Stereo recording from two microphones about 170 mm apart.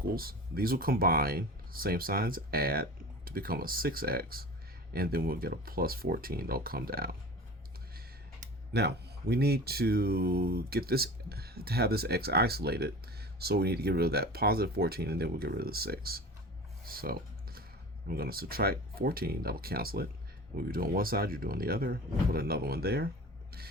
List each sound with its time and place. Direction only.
0.1 s speech: 60° right (ahead or behind)
8.7 s speech: 70° right (ahead or behind)
16.8 s computer keyboard: 60° right (ahead or behind)
18.1 s speech: 60° right (ahead or behind)